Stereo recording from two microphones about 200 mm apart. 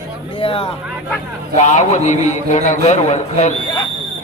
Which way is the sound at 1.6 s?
35° left (ahead or behind).